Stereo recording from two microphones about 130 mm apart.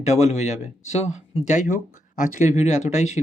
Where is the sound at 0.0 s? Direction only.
60° left (ahead or behind).